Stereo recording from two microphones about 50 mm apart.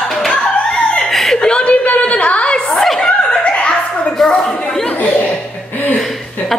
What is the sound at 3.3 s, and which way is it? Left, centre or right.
Chuckle, left.